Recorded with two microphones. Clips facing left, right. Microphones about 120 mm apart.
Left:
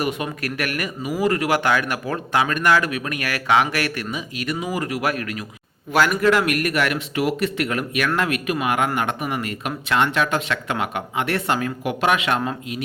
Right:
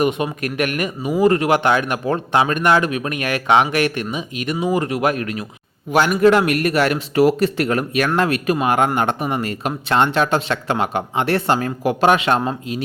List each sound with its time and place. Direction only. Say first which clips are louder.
0.0 s speech: right 5 dB; 20° right (ahead or behind)